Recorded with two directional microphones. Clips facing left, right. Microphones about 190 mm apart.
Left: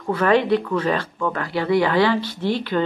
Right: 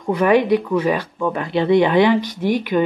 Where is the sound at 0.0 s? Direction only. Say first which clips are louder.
Right 3 dB; 15° right (ahead or behind).